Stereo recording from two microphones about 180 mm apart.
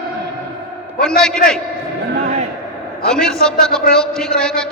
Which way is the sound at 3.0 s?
5° left (ahead or behind).